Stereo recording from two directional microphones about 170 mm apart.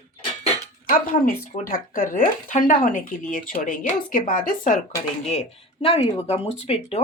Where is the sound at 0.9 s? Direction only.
55° left (ahead or behind).